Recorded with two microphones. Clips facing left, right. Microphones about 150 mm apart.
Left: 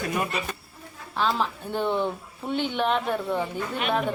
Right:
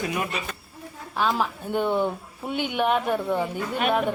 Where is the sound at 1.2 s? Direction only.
5° right (ahead or behind).